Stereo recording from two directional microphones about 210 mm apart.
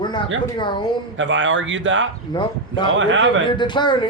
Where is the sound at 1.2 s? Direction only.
60° right (ahead or behind).